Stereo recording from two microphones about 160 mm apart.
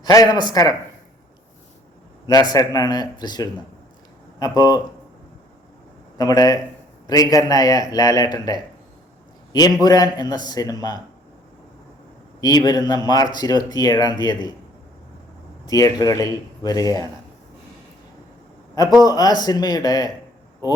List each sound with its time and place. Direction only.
0.0 s a man's voice: 25° left (ahead or behind)
2.2 s speech: 25° left (ahead or behind)
6.1 s a man's voice: 25° left (ahead or behind)
12.4 s speech: 25° left (ahead or behind)
15.6 s speech: 20° left (ahead or behind)
19.0 s speech: 25° left (ahead or behind)